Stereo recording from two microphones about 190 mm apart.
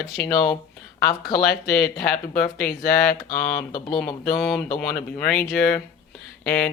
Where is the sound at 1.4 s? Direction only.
55° left (ahead or behind).